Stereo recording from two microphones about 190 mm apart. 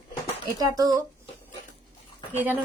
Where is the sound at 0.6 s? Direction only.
20° right (ahead or behind).